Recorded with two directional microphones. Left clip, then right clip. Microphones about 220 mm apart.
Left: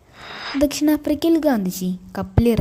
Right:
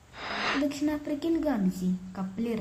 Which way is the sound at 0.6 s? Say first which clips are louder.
Left 11 dB; 45° left (ahead or behind).